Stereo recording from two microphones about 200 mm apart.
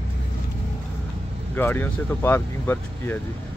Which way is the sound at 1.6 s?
10° left (ahead or behind).